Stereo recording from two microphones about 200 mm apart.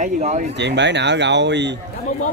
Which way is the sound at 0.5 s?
60° right (ahead or behind).